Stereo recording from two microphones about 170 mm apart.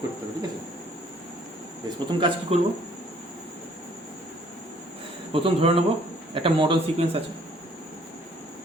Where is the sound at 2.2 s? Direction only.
35° right (ahead or behind).